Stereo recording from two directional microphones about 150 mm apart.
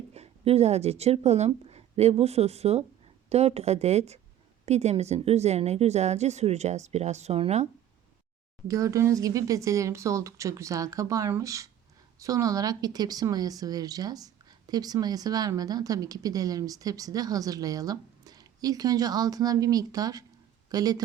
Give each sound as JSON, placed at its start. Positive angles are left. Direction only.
{"t": 0.1, "sound": "a woman's voice", "side_deg": -45}
{"t": 8.6, "sound": "a woman's voice", "side_deg": -20}